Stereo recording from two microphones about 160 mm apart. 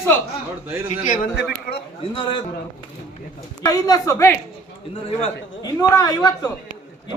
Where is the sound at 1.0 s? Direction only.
55° left (ahead or behind).